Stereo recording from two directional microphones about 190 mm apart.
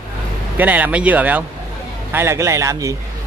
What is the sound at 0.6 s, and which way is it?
Speech, 10° right (ahead or behind).